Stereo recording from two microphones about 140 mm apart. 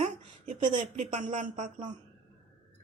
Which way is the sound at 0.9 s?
60° right (ahead or behind).